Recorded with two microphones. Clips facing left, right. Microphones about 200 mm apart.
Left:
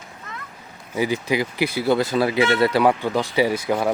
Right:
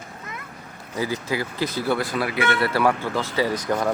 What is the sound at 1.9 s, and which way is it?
Speech, 25° left (ahead or behind).